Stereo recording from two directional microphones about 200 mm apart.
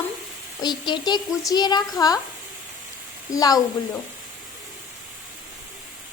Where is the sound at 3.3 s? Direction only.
20° left (ahead or behind).